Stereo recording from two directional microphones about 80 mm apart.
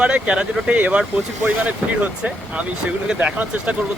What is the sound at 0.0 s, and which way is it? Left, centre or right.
Speech, centre.